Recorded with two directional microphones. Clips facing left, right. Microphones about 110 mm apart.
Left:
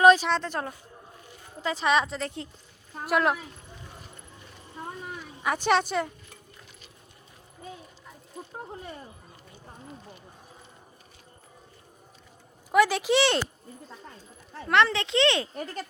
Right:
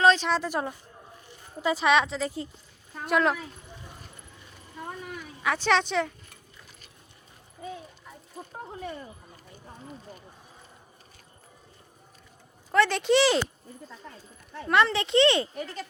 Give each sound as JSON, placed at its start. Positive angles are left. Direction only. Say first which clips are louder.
{"t": 0.0, "sound": "a sound", "louder": "left 3 dB", "side_deg": 10}
{"t": 0.3, "sound": "a woman's voice", "louder": "right 1 dB", "side_deg": -5}
{"t": 5.5, "sound": "a woman's voice", "louder": "even", "side_deg": 15}
{"t": 12.7, "sound": "speech", "louder": "even", "side_deg": 5}
{"t": 14.7, "sound": "speech", "louder": "even", "side_deg": 0}
{"t": 15.5, "sound": "speech", "louder": "left 1 dB", "side_deg": 45}